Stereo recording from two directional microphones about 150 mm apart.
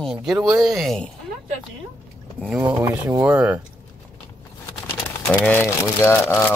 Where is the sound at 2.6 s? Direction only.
25° right (ahead or behind).